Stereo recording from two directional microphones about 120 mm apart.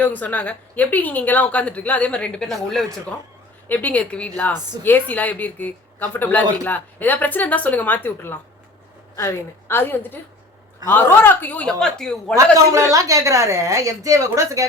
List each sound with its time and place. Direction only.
0.0 s a woman's voice: 15° left (ahead or behind)
12.7 s a woman's voice: 30° right (ahead or behind)